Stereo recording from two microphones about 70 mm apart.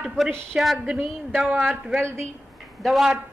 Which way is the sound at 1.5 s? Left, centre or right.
Centre.